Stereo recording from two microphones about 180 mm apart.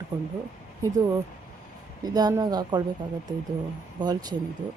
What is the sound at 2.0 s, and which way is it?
Speech, 20° right (ahead or behind).